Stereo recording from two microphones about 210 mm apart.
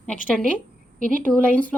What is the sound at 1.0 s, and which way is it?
Speech, 40° right (ahead or behind).